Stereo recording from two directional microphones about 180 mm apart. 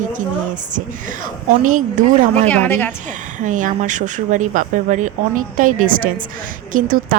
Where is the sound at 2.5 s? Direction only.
10° left (ahead or behind).